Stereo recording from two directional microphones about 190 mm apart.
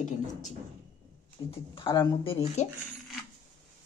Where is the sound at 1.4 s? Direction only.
30° left (ahead or behind).